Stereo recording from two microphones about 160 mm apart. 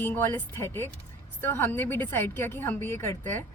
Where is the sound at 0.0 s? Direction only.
10° left (ahead or behind).